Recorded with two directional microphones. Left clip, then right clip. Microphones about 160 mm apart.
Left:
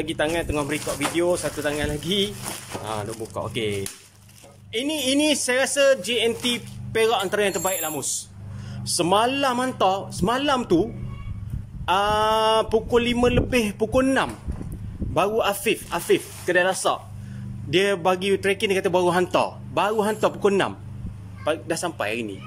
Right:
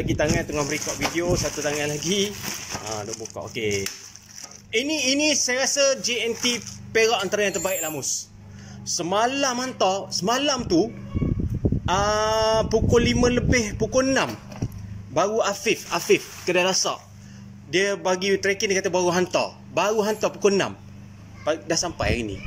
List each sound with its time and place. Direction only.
0.0 s speech: centre (ahead or behind)
8.9 s speech: 10° left (ahead or behind)